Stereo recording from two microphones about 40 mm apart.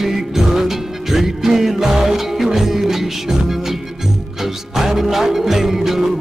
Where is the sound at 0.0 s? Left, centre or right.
Centre.